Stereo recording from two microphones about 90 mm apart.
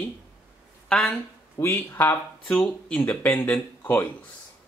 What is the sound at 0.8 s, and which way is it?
Speech, 10° left (ahead or behind).